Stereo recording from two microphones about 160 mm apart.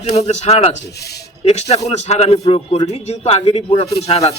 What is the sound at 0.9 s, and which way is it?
Speech, 90° left.